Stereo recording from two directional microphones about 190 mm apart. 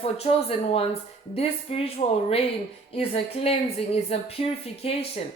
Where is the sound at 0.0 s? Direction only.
30° left (ahead or behind).